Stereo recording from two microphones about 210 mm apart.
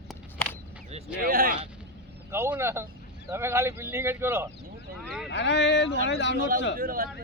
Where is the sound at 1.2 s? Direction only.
45° right (ahead or behind).